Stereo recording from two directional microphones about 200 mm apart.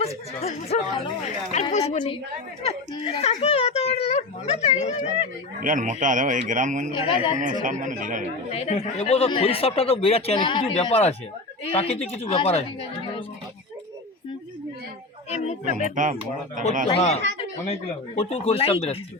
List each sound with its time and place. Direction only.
0.0 s a child's voice: 30° left (ahead or behind)
5.5 s speech: 40° right (ahead or behind)
7.0 s speech: 25° left (ahead or behind)
7.6 s speech: 40° right (ahead or behind)
8.4 s a child's voice: 35° left (ahead or behind)
15.3 s speech: 35° left (ahead or behind)
15.7 s speech: 40° right (ahead or behind)
16.9 s a child's voice: 30° left (ahead or behind)